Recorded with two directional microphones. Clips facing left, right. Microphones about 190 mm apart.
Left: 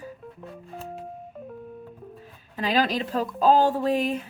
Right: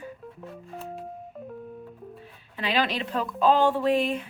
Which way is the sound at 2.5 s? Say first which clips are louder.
Left 3 dB; 40° left (ahead or behind).